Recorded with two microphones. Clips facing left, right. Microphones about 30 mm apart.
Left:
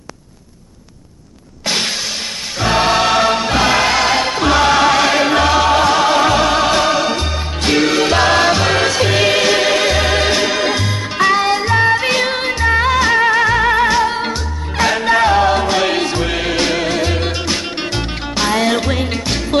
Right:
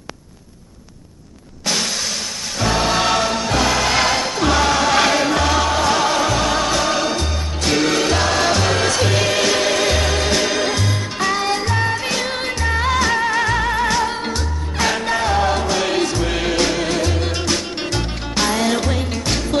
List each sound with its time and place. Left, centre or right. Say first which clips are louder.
2.6 s music: left 4 dB; left
3.3 s music: left 4 dB; left